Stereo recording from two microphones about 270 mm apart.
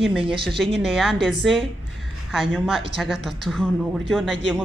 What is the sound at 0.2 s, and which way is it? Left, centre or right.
Speech, centre.